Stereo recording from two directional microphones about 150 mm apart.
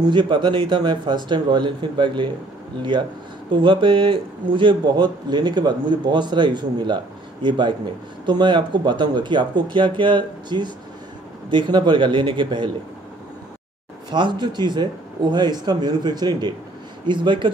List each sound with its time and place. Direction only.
0.1 s a man's voice: 30° right (ahead or behind)
14.1 s a man's voice: 30° right (ahead or behind)